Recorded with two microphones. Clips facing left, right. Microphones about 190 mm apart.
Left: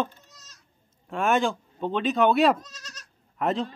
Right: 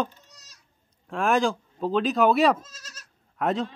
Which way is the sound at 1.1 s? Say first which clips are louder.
Right 1 dB; centre (ahead or behind).